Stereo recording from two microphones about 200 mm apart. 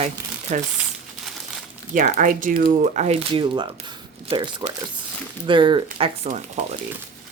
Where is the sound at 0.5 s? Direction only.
35° right (ahead or behind).